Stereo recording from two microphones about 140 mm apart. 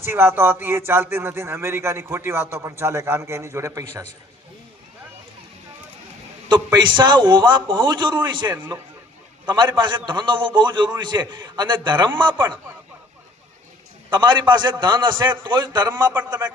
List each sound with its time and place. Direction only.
0.0 s speech: 15° right (ahead or behind)
6.7 s a man's voice: 35° right (ahead or behind)
14.1 s a man's voice: 35° right (ahead or behind)